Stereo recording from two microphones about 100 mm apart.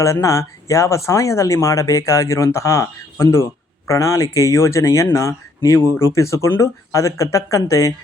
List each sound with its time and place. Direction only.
0.0 s speech: 30° left (ahead or behind)